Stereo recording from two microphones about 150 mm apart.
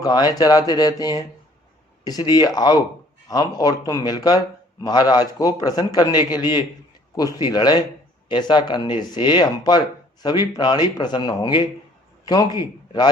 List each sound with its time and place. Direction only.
0.0 s a man's voice: 25° left (ahead or behind)